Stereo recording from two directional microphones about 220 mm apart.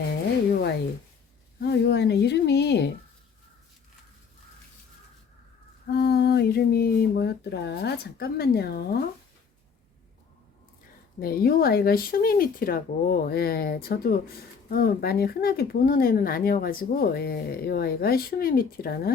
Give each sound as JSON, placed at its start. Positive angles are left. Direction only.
{"t": 1.6, "sound": "speech", "side_deg": 50}
{"t": 5.9, "sound": "speech", "side_deg": 45}
{"t": 11.2, "sound": "speech", "side_deg": 45}